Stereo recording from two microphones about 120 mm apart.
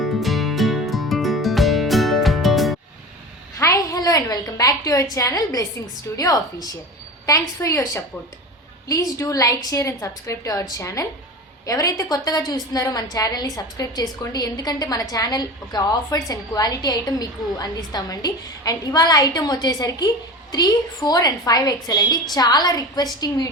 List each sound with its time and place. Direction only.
0.0 s music: centre (ahead or behind)
3.6 s a sound: 30° left (ahead or behind)
5.1 s a woman's voice: 30° left (ahead or behind)